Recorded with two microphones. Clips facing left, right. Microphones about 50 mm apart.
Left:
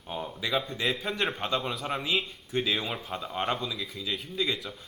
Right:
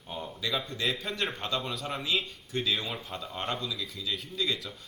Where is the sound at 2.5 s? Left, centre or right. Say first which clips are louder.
Left 2 dB; centre.